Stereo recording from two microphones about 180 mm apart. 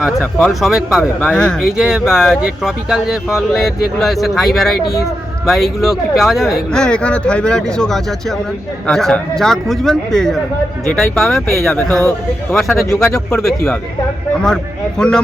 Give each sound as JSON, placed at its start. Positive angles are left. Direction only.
{"t": 0.0, "sound": "speech", "side_deg": 0}
{"t": 13.1, "sound": "speech", "side_deg": 5}